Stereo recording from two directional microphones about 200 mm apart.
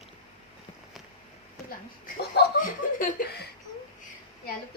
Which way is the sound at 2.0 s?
55° left (ahead or behind).